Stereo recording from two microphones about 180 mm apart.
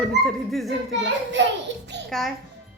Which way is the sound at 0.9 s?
90° right.